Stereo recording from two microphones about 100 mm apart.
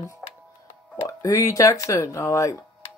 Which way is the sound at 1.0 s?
35° left (ahead or behind).